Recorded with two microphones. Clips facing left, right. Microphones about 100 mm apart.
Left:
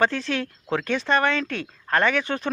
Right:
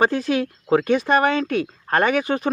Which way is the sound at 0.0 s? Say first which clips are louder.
Right 4 dB; 10° right (ahead or behind).